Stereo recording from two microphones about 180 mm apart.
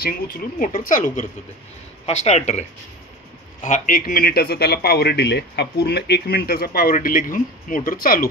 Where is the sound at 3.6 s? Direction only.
45° left (ahead or behind).